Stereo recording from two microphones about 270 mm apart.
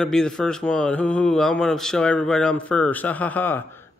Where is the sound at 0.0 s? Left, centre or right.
Centre.